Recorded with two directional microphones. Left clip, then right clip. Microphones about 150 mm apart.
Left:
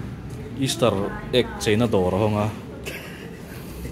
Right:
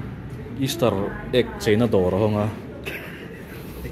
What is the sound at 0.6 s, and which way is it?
A man's voice, centre (ahead or behind).